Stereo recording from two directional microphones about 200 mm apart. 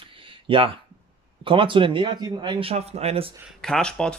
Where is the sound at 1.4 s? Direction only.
25° right (ahead or behind).